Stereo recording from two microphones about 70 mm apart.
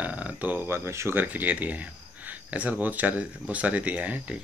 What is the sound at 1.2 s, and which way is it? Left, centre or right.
Speech, right.